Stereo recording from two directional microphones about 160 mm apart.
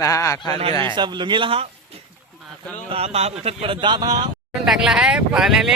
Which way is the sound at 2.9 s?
40° right (ahead or behind).